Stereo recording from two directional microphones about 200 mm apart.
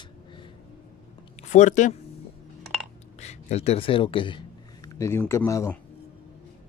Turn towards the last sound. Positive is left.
turn(degrees=10)  # may be behind; listen again after turning